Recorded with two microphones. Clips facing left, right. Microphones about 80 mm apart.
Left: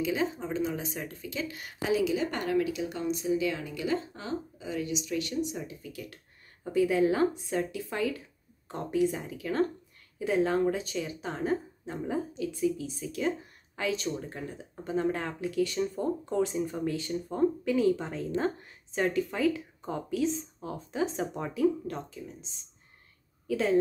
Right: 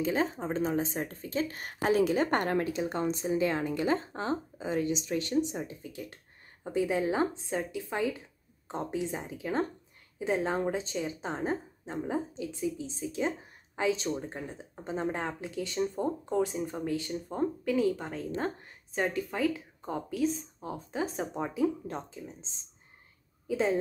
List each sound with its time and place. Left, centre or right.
0.0 s a woman's voice: right; by 21.5 s centre
21.8 s a woman's voice: right
23.4 s speech: centre